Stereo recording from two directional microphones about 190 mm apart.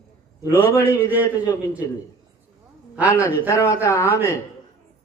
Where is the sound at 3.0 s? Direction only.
10° right (ahead or behind).